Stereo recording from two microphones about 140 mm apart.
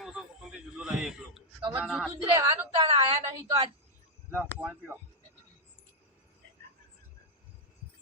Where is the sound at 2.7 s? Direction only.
40° right (ahead or behind).